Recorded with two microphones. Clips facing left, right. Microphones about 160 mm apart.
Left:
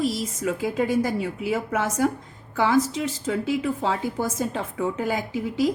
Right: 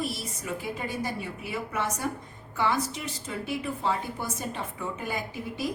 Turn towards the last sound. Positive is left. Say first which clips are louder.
# left 9 dB
turn(degrees=90)